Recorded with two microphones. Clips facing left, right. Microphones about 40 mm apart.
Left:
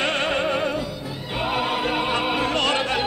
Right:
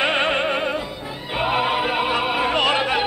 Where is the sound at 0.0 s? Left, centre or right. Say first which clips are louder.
Right 3 dB; centre.